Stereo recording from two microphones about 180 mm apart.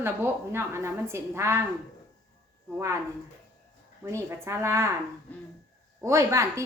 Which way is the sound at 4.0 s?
15° right (ahead or behind).